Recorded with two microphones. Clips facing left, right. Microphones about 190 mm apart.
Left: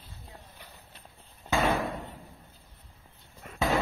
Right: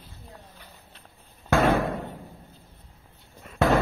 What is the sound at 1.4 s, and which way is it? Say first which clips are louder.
Slam: right 6 dB; 60° right (ahead or behind).